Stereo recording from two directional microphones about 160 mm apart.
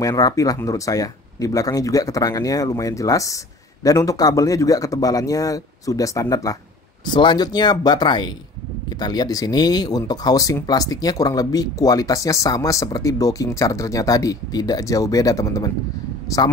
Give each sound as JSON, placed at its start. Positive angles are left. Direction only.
{"t": 0.0, "sound": "speech", "side_deg": 20}